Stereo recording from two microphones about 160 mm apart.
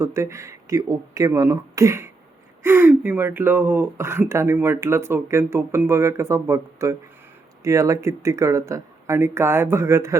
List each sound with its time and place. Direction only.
0.0 s speech: 20° right (ahead or behind)